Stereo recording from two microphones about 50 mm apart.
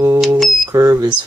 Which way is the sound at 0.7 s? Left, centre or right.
Right.